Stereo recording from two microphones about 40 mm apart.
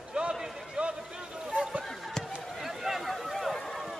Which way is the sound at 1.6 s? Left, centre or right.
Right.